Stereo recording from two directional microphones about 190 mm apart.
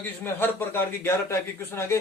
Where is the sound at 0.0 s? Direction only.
10° left (ahead or behind).